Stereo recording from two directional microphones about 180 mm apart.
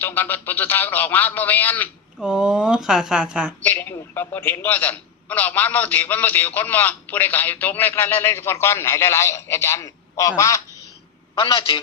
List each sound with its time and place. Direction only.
0.0 s a man's voice: 10° left (ahead or behind)
2.2 s speech: 5° right (ahead or behind)
3.6 s a man's voice: 10° left (ahead or behind)
11.3 s a man's voice: 30° left (ahead or behind)